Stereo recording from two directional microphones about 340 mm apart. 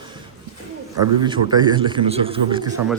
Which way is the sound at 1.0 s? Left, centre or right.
Centre.